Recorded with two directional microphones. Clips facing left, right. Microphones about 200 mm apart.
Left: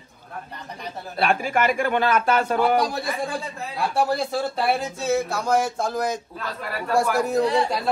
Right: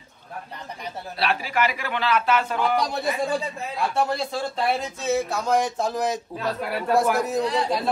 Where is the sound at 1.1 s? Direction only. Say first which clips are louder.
Left 4 dB; 50° left (ahead or behind).